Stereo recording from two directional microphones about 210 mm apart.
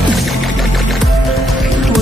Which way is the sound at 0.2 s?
Centre (ahead or behind).